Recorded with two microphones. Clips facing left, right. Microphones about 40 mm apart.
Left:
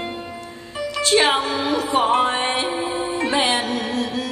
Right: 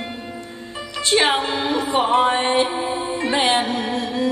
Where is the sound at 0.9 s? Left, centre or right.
Right.